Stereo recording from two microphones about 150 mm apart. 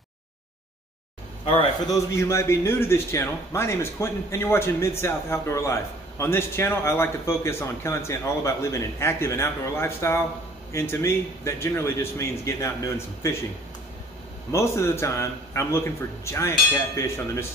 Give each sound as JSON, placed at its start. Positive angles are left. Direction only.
{"t": 1.4, "sound": "speech", "side_deg": 35}
{"t": 1.9, "sound": "a man's voice", "side_deg": 20}
{"t": 14.5, "sound": "speech", "side_deg": 20}